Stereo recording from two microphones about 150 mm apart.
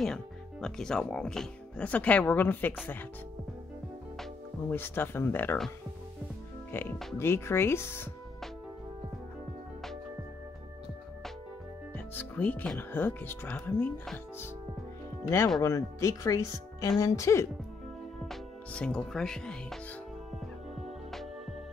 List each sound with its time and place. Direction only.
0.0 s speech: 5° left (ahead or behind)
4.2 s speech: 15° left (ahead or behind)
7.2 s speech: 15° left (ahead or behind)
12.1 s speech: 10° left (ahead or behind)
18.2 s speech: 5° left (ahead or behind)
20.8 s music: centre (ahead or behind)